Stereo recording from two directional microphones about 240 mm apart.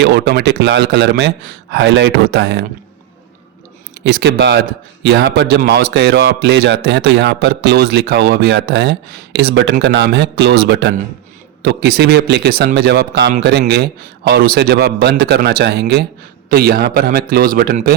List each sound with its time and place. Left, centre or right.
0.0 s a man's voice: right
4.0 s a man's voice: right